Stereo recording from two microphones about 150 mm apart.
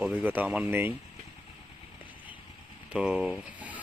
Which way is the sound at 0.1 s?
15° right (ahead or behind).